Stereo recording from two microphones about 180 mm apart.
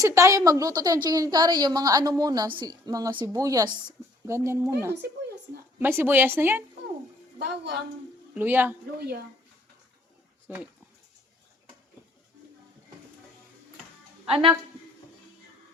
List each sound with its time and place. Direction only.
0.0 s a woman's voice: 15° right (ahead or behind)
7.3 s a woman's voice: 70° right (ahead or behind)
8.4 s speech: 10° right (ahead or behind)
9.0 s speech: 60° right (ahead or behind)
10.5 s speech: 10° right (ahead or behind)
14.3 s speech: 30° right (ahead or behind)